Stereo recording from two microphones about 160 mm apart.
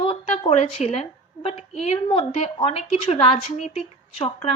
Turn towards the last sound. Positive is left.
turn(degrees=40)  # may be behind; listen again after turning